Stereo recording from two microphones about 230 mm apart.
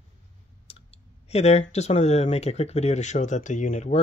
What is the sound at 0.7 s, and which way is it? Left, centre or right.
Speech, left.